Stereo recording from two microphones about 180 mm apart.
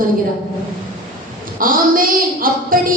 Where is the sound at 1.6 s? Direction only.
50° right (ahead or behind).